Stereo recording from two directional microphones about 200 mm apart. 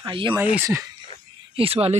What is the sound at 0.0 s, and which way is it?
Speech, 25° right (ahead or behind).